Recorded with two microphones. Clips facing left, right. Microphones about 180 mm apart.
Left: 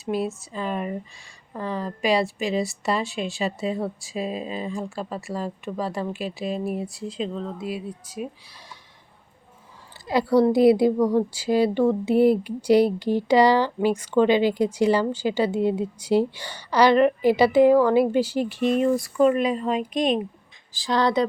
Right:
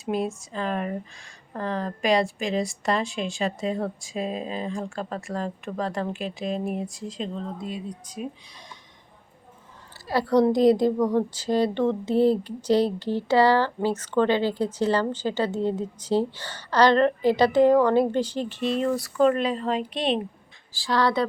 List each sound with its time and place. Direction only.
0.0 s speech: 5° left (ahead or behind)
10.1 s a woman's voice: 10° left (ahead or behind)